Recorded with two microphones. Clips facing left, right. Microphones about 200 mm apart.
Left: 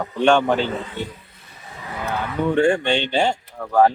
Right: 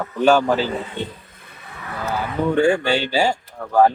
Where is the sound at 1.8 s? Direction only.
20° left (ahead or behind).